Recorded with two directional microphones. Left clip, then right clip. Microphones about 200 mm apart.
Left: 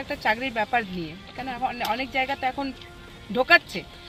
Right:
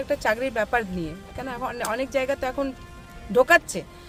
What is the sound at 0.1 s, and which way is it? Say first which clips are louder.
Speech: right 1 dB; 20° right (ahead or behind).